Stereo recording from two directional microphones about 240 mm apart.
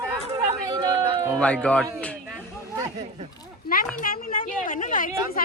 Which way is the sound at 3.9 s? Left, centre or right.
Left.